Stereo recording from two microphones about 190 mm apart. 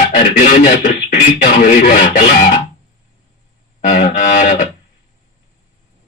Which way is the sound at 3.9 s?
35° left (ahead or behind).